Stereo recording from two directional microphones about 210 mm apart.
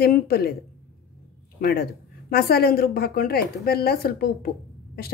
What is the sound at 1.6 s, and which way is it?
A woman's voice, 45° left (ahead or behind).